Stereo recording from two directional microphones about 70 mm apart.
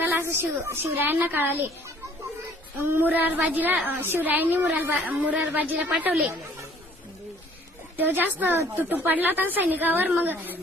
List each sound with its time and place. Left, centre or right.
0.0 s a woman's voice: right
2.9 s a woman's voice: right
7.9 s a woman's voice: right